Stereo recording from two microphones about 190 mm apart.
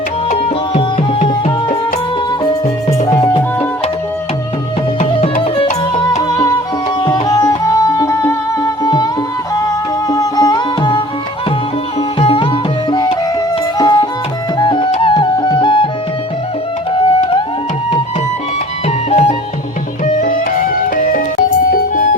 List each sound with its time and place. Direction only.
0.3 s music: 35° left (ahead or behind)
3.1 s music: 25° left (ahead or behind)
4.9 s music: 35° left (ahead or behind)
6.2 s music: 20° left (ahead or behind)
10.1 s music: 20° left (ahead or behind)
12.2 s music: 30° left (ahead or behind)
13.7 s music: 20° left (ahead or behind)
16.9 s music: 30° left (ahead or behind)
19.1 s music: 35° left (ahead or behind)